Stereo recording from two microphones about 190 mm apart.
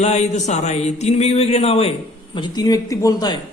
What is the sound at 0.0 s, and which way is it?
Speech, 35° left (ahead or behind).